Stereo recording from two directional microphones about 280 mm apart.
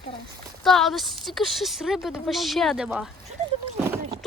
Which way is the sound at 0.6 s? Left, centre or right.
Centre.